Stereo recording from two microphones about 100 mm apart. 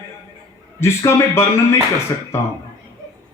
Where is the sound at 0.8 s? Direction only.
25° left (ahead or behind).